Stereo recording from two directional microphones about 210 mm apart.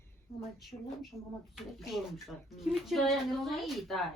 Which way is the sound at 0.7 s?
20° left (ahead or behind).